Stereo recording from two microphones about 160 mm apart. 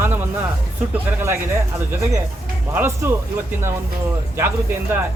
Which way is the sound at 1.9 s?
15° right (ahead or behind).